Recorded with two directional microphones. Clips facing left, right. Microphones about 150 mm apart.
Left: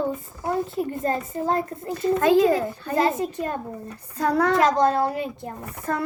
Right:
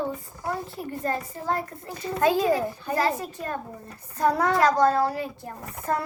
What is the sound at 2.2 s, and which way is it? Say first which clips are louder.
Speech: left 2 dB; 15° right (ahead or behind).